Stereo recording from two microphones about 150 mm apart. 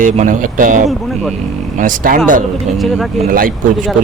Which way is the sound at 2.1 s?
65° right (ahead or behind).